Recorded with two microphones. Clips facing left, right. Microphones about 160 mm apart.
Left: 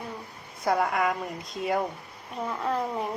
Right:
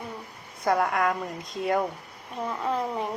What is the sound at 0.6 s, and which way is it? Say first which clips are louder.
A child's voice: right 1 dB; centre (ahead or behind).